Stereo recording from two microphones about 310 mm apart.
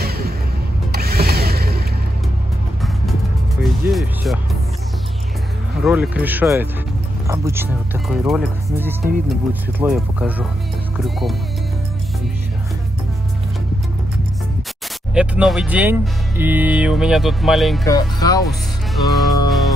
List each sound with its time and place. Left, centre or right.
0.0 s music: right
0.9 s mechanisms: right
3.6 s music: centre
5.9 s speech: centre
15.1 s speech: centre
17.8 s speech: centre
19.0 s music: centre